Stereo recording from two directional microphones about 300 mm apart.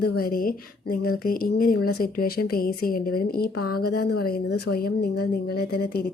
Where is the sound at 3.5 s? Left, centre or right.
Left.